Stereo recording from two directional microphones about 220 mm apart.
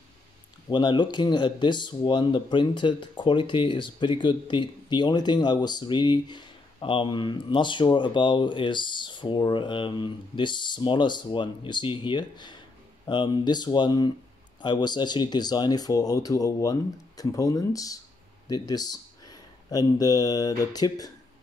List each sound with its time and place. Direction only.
0.7 s speech: 20° left (ahead or behind)